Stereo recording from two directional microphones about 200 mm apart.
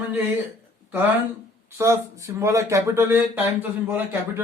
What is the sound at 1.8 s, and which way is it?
Speech, 15° right (ahead or behind).